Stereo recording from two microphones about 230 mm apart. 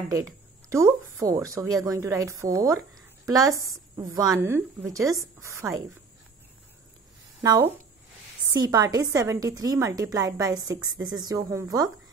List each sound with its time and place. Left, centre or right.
0.7 s a woman's voice: centre
7.4 s a woman's voice: centre